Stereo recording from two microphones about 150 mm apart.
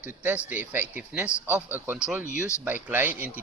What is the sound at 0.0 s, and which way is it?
A man's voice, 10° right (ahead or behind).